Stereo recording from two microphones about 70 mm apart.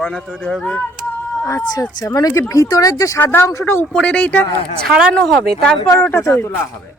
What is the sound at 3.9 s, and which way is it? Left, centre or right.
Speech, centre.